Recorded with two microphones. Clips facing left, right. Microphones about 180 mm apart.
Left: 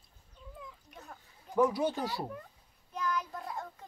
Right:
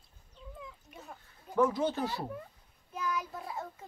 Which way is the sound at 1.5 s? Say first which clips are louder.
Even; 15° left (ahead or behind).